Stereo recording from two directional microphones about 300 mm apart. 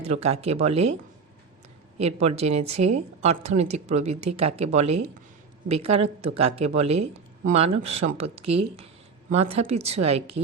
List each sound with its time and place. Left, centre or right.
0.0 s speech: right
2.0 s speech: right